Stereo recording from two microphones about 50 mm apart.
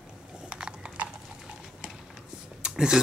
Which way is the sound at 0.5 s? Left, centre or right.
Centre.